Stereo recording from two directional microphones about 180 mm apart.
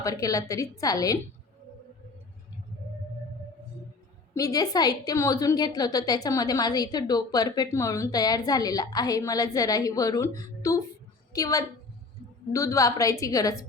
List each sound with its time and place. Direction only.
0.0 s a woman's voice: 20° left (ahead or behind)
4.4 s a woman's voice: 20° left (ahead or behind)